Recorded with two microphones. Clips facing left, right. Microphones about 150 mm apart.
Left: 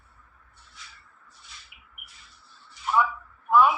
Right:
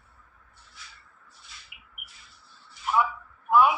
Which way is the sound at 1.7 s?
5° right (ahead or behind).